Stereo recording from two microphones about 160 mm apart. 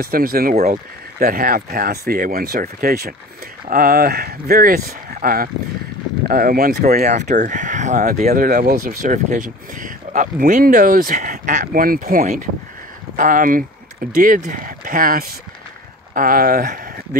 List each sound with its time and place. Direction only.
0.0 s speech: 65° right (ahead or behind)
7.1 s speech: 50° right (ahead or behind)
8.3 s speech: 60° right (ahead or behind)